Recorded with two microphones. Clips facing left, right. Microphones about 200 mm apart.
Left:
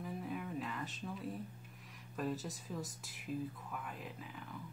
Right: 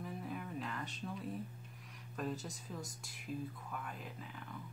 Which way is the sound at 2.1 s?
Centre (ahead or behind).